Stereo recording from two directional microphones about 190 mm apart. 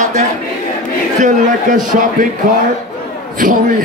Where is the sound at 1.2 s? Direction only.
45° right (ahead or behind).